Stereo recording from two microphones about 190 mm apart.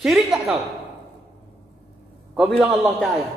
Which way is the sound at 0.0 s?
Centre (ahead or behind).